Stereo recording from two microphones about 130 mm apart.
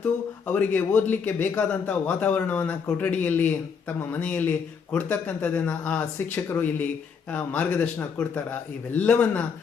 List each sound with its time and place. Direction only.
0.0 s speech: 10° left (ahead or behind)